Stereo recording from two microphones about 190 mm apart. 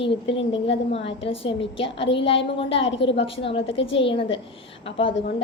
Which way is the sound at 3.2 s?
30° left (ahead or behind).